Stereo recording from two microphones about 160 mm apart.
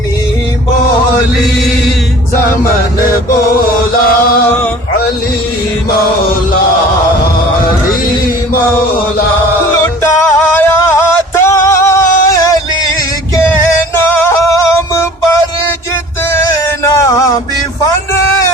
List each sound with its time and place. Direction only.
10.0 s music: 15° left (ahead or behind)
13.9 s music: 15° left (ahead or behind)